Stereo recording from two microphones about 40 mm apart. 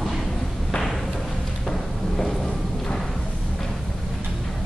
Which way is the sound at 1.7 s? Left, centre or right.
Centre.